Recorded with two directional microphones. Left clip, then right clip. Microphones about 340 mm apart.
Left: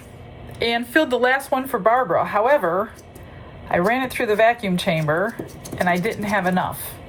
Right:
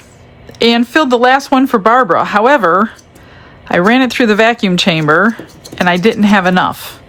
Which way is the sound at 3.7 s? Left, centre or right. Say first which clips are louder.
Right 9 dB; right.